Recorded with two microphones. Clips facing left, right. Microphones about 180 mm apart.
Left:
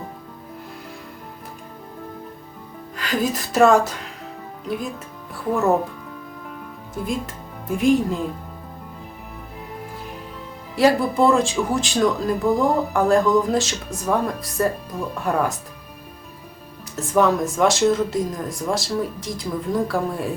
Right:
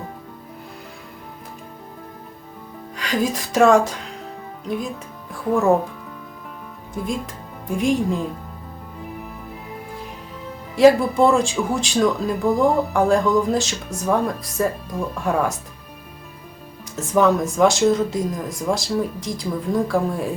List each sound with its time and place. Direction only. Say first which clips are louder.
2.9 s speech: right 1 dB; centre (ahead or behind)
6.9 s speech: even; centre (ahead or behind)
10.8 s speech: right 4 dB; centre (ahead or behind)
16.9 s speech: right 1 dB; centre (ahead or behind)